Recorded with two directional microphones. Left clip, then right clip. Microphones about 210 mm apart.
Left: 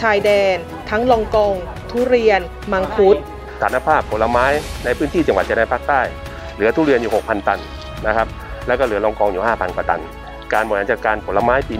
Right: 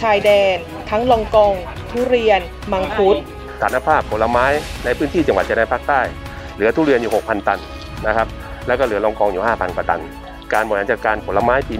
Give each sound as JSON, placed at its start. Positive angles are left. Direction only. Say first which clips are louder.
{"t": 0.0, "sound": "speech", "louder": "right 1 dB", "side_deg": 15}
{"t": 3.5, "sound": "speech", "louder": "even", "side_deg": 0}